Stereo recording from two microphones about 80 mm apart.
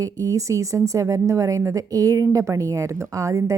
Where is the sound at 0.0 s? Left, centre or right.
Right.